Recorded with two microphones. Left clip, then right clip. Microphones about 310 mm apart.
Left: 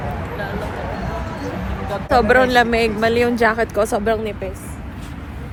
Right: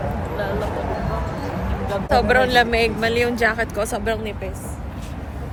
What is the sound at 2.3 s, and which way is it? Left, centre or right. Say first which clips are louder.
Speech: left 2 dB; centre.